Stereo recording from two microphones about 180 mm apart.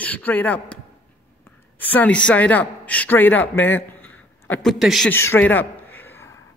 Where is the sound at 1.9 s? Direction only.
5° left (ahead or behind).